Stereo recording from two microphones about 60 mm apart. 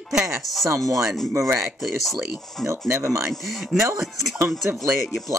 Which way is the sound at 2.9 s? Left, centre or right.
Right.